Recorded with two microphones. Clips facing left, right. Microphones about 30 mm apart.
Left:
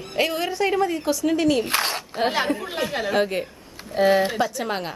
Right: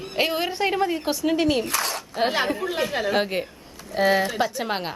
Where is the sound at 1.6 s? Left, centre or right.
Left.